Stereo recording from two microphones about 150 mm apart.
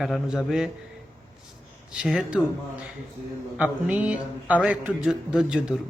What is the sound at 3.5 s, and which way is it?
A man's voice, 10° right (ahead or behind).